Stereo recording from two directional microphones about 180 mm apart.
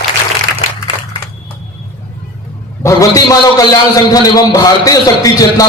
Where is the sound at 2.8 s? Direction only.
20° left (ahead or behind).